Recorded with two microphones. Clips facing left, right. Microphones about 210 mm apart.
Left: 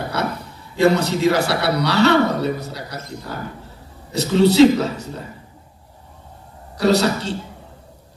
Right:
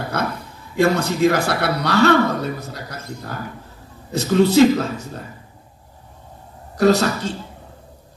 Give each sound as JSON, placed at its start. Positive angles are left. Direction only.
{"t": 0.7, "sound": "a man's voice", "side_deg": -50}
{"t": 6.8, "sound": "a man's voice", "side_deg": -50}